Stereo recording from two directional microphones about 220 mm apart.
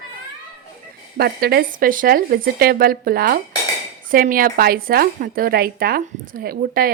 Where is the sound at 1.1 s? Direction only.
45° right (ahead or behind).